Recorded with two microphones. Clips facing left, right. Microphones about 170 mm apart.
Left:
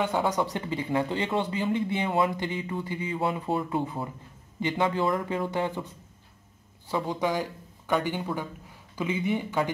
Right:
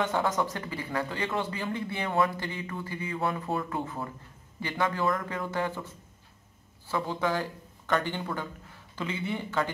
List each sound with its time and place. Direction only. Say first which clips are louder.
0.0 s speech: left 2 dB; 15° left (ahead or behind)
6.9 s speech: left 2 dB; 15° left (ahead or behind)